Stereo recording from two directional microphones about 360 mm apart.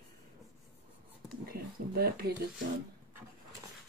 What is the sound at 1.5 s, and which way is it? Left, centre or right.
Speech, right.